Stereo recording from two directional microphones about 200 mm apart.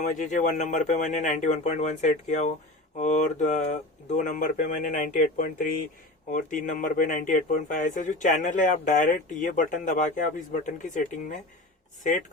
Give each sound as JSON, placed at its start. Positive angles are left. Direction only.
{"t": 0.0, "sound": "speech", "side_deg": 40}